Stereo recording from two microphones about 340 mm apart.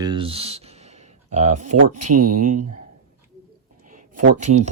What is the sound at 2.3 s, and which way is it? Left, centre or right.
Speech, right.